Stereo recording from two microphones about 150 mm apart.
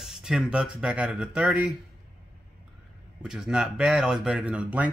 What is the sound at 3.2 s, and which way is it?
Speech, 5° right (ahead or behind).